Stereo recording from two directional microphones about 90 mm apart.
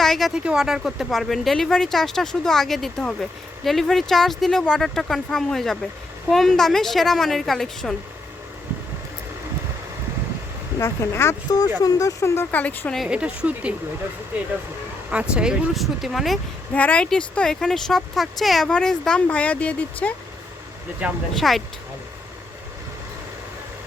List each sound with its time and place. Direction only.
0.0 s speech: centre (ahead or behind)
0.3 s speech: 10° right (ahead or behind)
10.8 s speech: 30° left (ahead or behind)
11.8 s speech: 40° left (ahead or behind); by 12.9 s 20° left (ahead or behind)
13.1 s a woman's voice: 10° right (ahead or behind)
15.1 s speech: 10° right (ahead or behind)
16.7 s speech: 15° left (ahead or behind)
21.0 s a woman's voice: 15° right (ahead or behind)
21.3 s speech: centre (ahead or behind)